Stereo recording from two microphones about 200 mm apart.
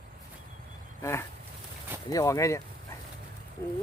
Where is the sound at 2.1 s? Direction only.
15° left (ahead or behind).